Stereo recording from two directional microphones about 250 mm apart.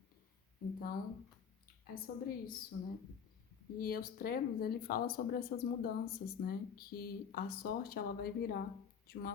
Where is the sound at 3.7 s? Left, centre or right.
Left.